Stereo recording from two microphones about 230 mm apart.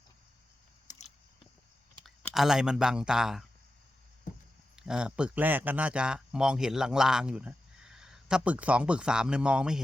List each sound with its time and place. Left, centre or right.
2.0 s speech: centre
4.3 s a sound: left
4.8 s speech: centre